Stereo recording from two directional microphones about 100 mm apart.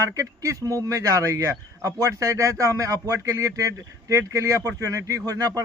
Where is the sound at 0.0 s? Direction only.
35° right (ahead or behind).